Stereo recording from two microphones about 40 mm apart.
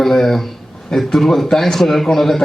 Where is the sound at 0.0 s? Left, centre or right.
Centre.